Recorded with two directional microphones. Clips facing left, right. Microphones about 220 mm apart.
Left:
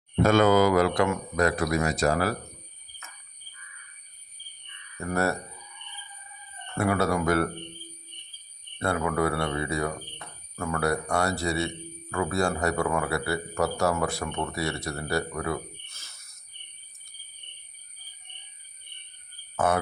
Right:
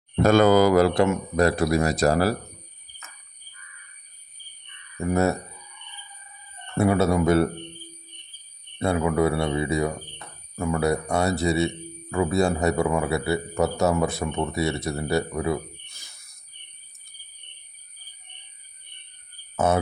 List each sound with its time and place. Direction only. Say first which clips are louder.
0.2 s speech: right 3 dB; 40° right (ahead or behind)
4.9 s a man's voice: right 5 dB; 20° right (ahead or behind)
6.7 s a man's voice: right 5 dB; 25° right (ahead or behind)
8.8 s a man's voice: right 4 dB; 20° right (ahead or behind)
19.5 s speech: right 3 dB; 25° right (ahead or behind)